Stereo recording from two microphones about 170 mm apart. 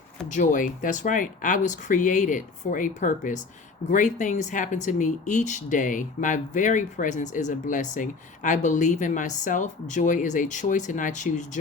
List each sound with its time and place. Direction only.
0.3 s speech: 50° left (ahead or behind)